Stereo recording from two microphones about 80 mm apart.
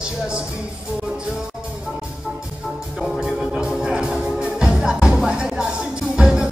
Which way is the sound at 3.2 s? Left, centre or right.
Centre.